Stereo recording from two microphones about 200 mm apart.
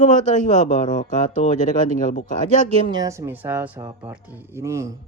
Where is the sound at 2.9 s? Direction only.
15° right (ahead or behind).